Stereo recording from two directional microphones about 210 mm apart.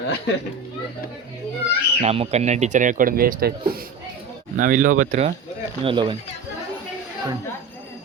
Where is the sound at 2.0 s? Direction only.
30° right (ahead or behind).